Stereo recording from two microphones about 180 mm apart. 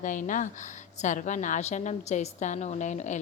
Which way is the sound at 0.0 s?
45° left (ahead or behind).